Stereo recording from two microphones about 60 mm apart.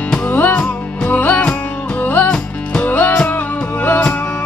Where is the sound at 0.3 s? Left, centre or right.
Left.